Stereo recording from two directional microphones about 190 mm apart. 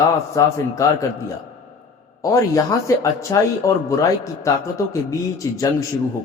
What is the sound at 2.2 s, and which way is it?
A man's voice, 15° left (ahead or behind).